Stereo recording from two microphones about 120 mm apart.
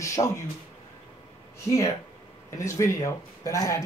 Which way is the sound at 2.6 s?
25° left (ahead or behind).